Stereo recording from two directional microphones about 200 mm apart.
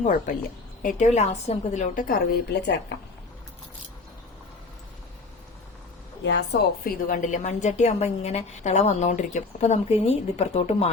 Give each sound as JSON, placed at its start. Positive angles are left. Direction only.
{"t": 0.8, "sound": "a woman's voice", "side_deg": 40}
{"t": 6.2, "sound": "a woman's voice", "side_deg": 55}